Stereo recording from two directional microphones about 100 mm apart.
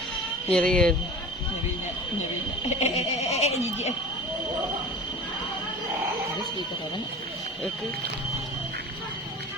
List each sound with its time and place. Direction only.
0.5 s speech: 10° left (ahead or behind)
2.6 s speech: 90° left